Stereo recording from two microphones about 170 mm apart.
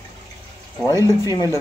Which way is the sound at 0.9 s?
20° right (ahead or behind).